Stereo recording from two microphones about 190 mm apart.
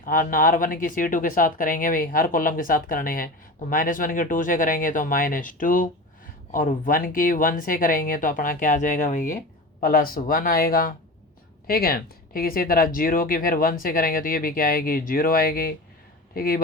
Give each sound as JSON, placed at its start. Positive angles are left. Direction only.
{"t": 0.0, "sound": "speech", "side_deg": 45}